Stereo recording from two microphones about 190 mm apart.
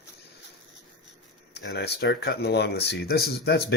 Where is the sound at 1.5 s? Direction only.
60° left (ahead or behind).